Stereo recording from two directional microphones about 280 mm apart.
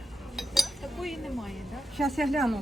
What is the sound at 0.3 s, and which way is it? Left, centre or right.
Chink, centre.